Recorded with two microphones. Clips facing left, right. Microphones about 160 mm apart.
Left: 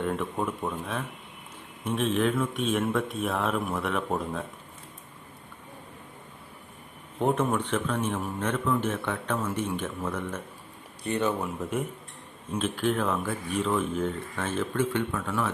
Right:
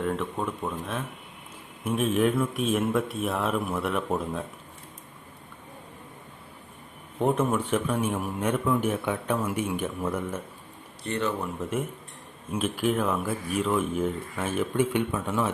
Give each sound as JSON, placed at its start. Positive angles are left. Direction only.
{"t": 0.0, "sound": "speech", "side_deg": 0}
{"t": 7.2, "sound": "a man's voice", "side_deg": 0}
{"t": 11.0, "sound": "speech", "side_deg": 15}
{"t": 11.4, "sound": "a man's voice", "side_deg": 0}